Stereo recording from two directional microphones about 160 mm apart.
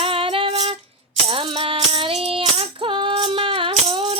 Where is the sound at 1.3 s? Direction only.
35° right (ahead or behind).